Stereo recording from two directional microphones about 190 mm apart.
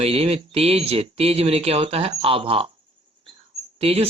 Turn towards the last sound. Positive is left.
turn(degrees=-30)  # may be behind; listen again after turning